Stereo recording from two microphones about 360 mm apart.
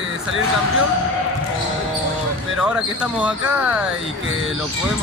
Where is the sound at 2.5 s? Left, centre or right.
Centre.